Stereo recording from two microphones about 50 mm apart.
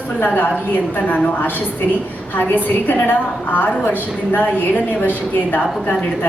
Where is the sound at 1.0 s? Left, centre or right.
Left.